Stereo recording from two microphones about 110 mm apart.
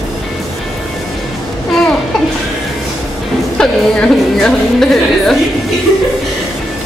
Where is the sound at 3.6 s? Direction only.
5° left (ahead or behind).